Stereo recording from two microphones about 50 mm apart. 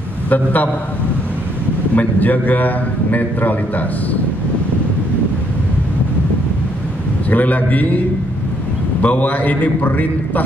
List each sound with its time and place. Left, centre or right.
0.3 s a man's voice: left
2.0 s a man's voice: left
7.2 s a man's voice: left
9.0 s a man's voice: left